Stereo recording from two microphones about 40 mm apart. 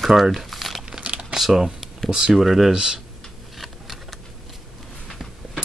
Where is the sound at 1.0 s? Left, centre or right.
Right.